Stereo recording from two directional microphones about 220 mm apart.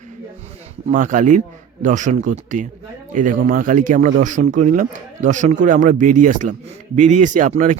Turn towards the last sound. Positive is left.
turn(degrees=-35)  # may be behind; listen again after turning